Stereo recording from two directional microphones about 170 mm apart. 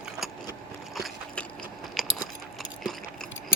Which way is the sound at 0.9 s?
Centre (ahead or behind).